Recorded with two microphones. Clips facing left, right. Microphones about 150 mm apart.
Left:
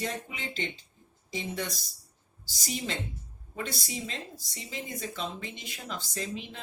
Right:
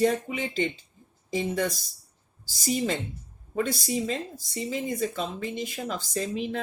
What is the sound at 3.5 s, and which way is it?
Speech, 55° right (ahead or behind).